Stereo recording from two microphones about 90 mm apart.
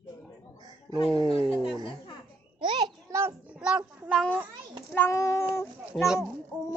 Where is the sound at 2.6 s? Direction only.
60° right (ahead or behind).